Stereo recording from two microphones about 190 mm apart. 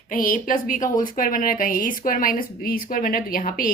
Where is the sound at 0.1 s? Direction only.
45° left (ahead or behind).